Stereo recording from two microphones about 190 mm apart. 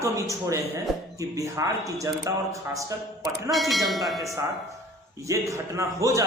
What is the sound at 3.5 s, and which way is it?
Speech, centre (ahead or behind).